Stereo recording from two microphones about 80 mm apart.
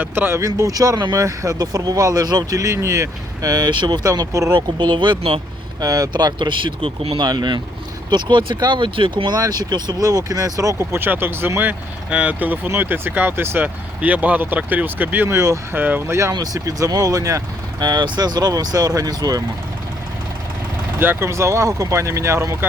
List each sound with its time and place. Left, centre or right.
0.0 s speech: right
1.1 s speech: right
4.8 s speech: right
5.8 s speech: right
8.1 s speech: right
9.3 s speech: right
10.9 s speech: right
16.3 s speech: right
16.6 s speech: right
17.7 s speech: right
21.0 s speech: right